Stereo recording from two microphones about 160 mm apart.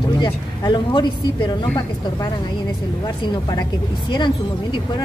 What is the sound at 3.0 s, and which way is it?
Speech, 25° left (ahead or behind).